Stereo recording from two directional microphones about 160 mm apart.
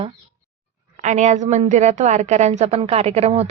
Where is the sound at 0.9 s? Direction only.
50° right (ahead or behind).